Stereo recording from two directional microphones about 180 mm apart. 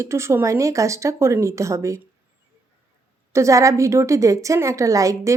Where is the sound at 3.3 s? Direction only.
15° right (ahead or behind).